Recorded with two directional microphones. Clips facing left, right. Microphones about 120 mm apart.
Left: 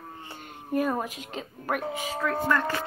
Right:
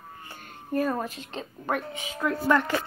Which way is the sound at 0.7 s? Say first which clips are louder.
Even; 15° left (ahead or behind).